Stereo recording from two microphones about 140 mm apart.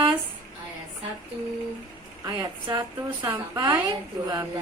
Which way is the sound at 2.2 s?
30° right (ahead or behind).